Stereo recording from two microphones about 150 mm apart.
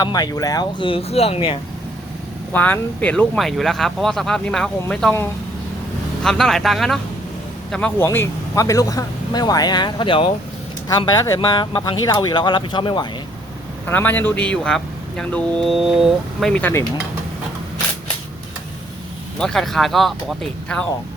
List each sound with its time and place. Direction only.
0.0 s speech: 25° left (ahead or behind)
2.5 s speech: 10° left (ahead or behind)
6.2 s speech: 5° left (ahead or behind); by 13.1 s 30° left (ahead or behind)
13.8 s speech: 15° left (ahead or behind)
19.4 s speech: 5° left (ahead or behind)